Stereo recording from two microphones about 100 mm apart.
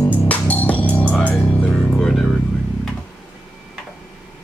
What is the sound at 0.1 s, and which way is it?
Music, 15° left (ahead or behind).